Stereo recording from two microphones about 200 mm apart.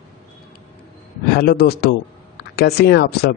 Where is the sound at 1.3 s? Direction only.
55° left (ahead or behind).